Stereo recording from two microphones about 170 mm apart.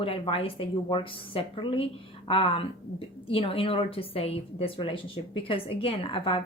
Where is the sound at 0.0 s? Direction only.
35° left (ahead or behind).